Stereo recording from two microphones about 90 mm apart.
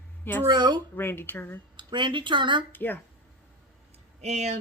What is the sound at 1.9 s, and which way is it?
Speech, 60° right (ahead or behind).